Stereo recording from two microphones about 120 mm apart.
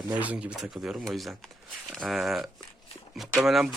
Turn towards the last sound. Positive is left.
turn(degrees=-5)  # may be behind; listen again after turning